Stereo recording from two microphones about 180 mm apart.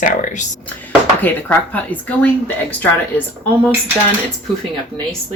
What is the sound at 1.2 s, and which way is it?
Speech, 10° left (ahead or behind).